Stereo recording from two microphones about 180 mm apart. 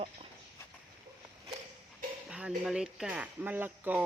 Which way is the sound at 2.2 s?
5° right (ahead or behind).